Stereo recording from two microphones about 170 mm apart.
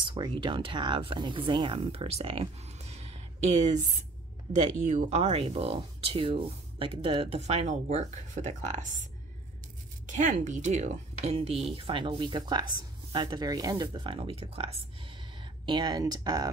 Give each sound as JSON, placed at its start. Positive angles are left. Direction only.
{"t": 0.0, "sound": "speech", "side_deg": -30}
{"t": 10.1, "sound": "speech", "side_deg": -50}